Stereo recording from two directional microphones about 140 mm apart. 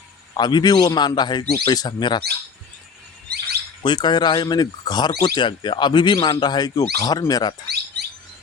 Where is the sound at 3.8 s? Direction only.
35° left (ahead or behind).